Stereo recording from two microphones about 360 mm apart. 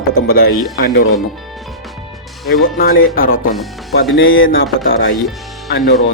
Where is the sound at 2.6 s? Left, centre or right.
Left.